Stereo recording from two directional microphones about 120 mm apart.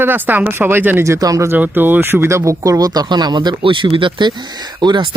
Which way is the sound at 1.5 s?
15° right (ahead or behind).